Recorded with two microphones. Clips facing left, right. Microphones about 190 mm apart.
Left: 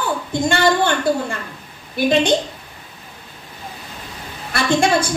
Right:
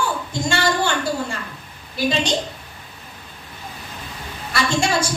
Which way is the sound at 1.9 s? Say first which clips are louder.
Left 5 dB; 55° left (ahead or behind).